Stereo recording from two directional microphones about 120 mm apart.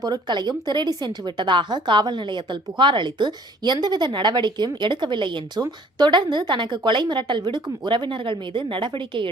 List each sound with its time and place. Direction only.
0.0 s a woman's voice: 35° right (ahead or behind)